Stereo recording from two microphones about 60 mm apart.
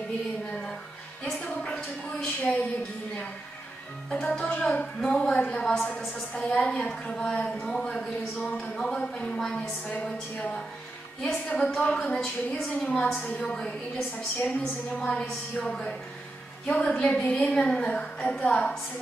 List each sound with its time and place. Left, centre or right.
0.5 s a sound: centre
1.8 s a woman's voice: left
4.1 s speech: centre
10.3 s a woman's voice: left
11.5 s a woman's voice: centre
16.6 s a woman's voice: left